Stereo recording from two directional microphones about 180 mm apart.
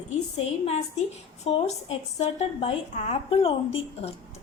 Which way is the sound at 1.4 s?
35° left (ahead or behind).